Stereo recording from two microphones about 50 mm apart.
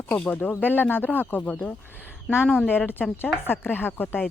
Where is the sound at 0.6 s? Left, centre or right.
Left.